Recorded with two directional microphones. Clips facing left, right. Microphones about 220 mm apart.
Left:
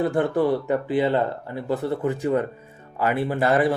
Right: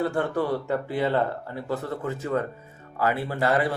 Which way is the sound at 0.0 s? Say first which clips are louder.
Left 4 dB; 20° left (ahead or behind).